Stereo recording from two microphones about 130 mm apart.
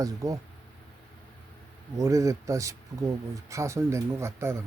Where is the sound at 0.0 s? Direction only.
25° right (ahead or behind).